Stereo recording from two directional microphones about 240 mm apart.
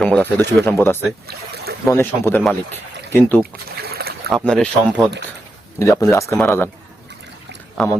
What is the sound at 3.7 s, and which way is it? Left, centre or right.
Boat, right.